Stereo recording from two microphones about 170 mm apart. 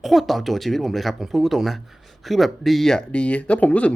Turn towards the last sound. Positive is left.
turn(degrees=5)  # may be behind; listen again after turning